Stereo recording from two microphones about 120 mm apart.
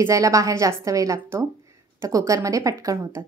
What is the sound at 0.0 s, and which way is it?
A woman's voice, 25° right (ahead or behind).